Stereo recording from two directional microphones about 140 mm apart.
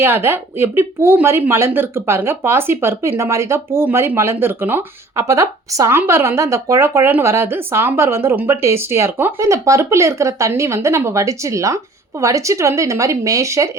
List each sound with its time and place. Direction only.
0.0 s speech: 15° right (ahead or behind)